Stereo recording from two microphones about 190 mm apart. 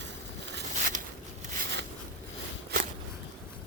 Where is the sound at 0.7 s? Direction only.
40° right (ahead or behind).